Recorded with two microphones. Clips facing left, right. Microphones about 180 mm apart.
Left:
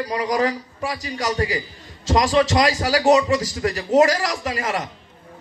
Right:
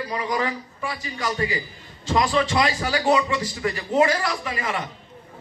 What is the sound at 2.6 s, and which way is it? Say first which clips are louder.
Speech: left 4 dB; 85° left.